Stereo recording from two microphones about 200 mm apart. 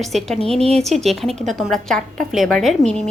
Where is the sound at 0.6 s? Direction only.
30° right (ahead or behind).